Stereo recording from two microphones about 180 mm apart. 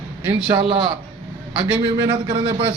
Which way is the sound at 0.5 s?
20° right (ahead or behind).